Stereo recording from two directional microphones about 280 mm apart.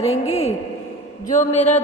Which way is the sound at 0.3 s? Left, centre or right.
Left.